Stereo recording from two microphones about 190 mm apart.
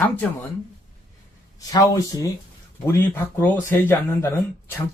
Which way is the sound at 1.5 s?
15° left (ahead or behind).